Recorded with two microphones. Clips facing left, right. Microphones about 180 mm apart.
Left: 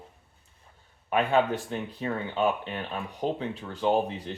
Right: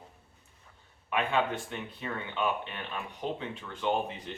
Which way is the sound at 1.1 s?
40° left (ahead or behind).